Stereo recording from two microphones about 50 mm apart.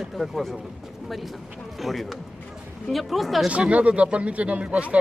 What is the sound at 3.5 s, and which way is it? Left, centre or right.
Speech, right.